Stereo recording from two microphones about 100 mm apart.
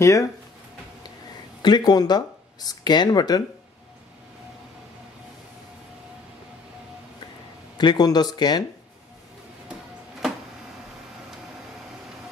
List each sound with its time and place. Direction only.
0.0 s speech: 30° left (ahead or behind)
1.6 s speech: 45° left (ahead or behind)
7.7 s speech: 45° left (ahead or behind)